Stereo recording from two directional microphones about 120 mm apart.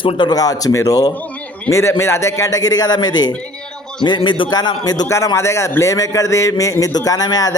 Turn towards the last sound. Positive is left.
turn(degrees=30)  # may be behind; listen again after turning